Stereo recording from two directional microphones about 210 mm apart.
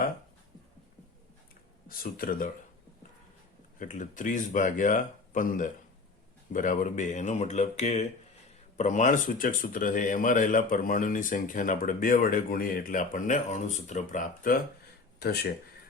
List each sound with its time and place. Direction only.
1.9 s speech: 45° left (ahead or behind)
3.8 s speech: 35° left (ahead or behind)